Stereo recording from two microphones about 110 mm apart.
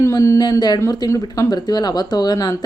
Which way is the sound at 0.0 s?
25° left (ahead or behind).